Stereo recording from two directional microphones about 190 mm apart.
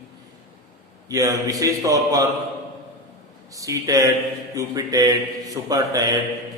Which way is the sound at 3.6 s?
15° right (ahead or behind).